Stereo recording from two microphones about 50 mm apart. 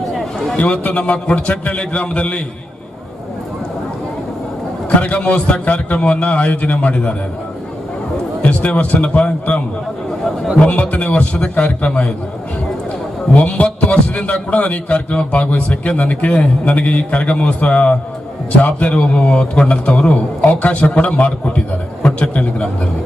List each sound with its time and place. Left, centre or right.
0.1 s a sound: centre
0.5 s a man's voice: left
4.9 s a man's voice: left
8.4 s a man's voice: left
10.6 s a man's voice: left
13.3 s a man's voice: left